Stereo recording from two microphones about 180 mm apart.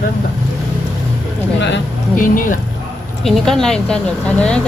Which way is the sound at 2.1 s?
50° left (ahead or behind).